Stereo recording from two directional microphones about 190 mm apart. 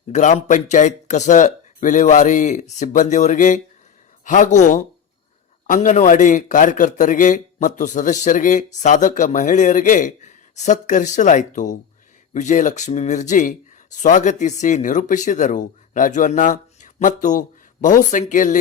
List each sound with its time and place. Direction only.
0.1 s speech: 40° left (ahead or behind)